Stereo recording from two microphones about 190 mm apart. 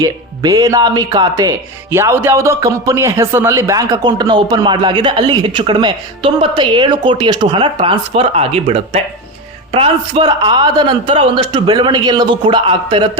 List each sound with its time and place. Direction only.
0.0 s speech: 20° right (ahead or behind)